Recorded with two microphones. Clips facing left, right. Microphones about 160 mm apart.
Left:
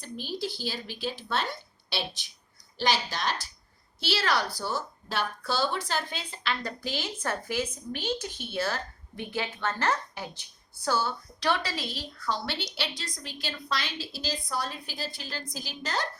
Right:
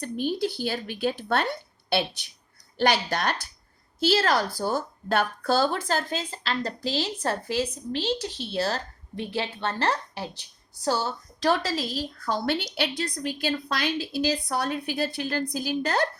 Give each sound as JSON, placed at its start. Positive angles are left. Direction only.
{"t": 0.0, "sound": "speech", "side_deg": -55}
{"t": 4.0, "sound": "a woman's voice", "side_deg": -45}